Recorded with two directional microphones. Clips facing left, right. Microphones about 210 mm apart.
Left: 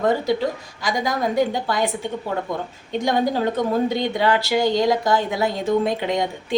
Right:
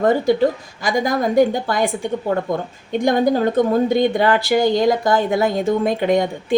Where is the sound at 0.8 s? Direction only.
50° right (ahead or behind).